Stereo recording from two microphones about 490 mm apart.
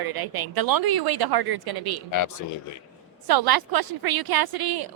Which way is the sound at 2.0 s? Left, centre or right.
Left.